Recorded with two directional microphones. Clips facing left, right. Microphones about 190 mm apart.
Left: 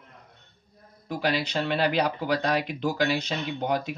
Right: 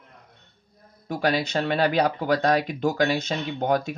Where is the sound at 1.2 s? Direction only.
45° right (ahead or behind).